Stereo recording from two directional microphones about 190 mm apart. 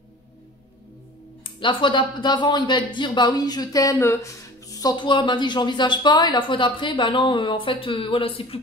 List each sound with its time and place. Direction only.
1.4 s speech: 25° left (ahead or behind)